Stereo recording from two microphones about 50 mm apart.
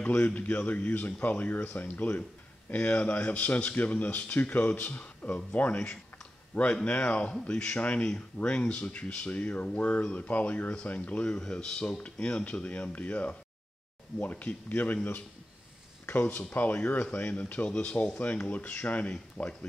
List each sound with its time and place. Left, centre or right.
0.0 s speech: left
11.3 s speech: centre
18.2 s speech: left